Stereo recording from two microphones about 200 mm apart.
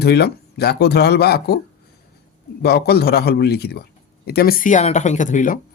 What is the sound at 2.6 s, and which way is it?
Speech, 55° left (ahead or behind).